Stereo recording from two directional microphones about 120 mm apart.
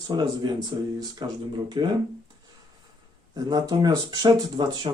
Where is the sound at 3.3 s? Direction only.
35° right (ahead or behind).